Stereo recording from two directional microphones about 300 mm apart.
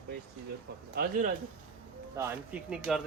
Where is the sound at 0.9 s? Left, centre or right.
Right.